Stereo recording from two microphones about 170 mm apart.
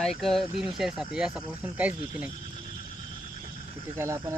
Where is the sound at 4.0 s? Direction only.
15° right (ahead or behind).